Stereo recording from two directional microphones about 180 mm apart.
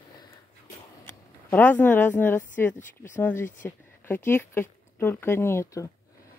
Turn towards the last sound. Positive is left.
turn(degrees=15)  # may be behind; listen again after turning